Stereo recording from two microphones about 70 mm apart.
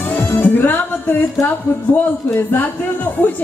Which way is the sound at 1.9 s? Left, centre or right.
Left.